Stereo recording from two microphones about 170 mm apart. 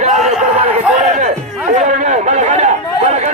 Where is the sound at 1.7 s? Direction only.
50° right (ahead or behind).